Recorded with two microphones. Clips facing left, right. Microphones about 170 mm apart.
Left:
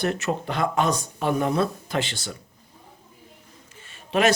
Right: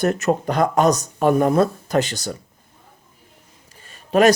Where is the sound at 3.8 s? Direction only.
40° right (ahead or behind).